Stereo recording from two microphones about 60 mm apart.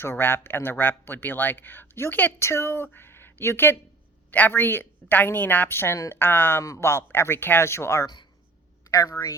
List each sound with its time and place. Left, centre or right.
0.0 s speech: left
2.4 s a woman's voice: left
6.6 s speech: left